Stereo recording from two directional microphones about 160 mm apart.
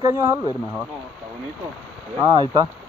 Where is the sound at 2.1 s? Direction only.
25° right (ahead or behind).